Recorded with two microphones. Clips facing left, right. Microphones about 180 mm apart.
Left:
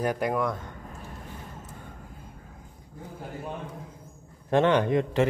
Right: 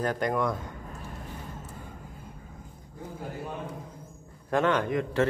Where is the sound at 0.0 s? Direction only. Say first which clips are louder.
Left 1 dB; 10° left (ahead or behind).